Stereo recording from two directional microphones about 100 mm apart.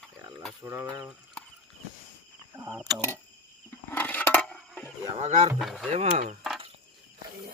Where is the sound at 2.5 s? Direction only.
30° right (ahead or behind).